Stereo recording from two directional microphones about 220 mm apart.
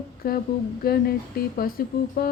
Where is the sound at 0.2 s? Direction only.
45° left (ahead or behind).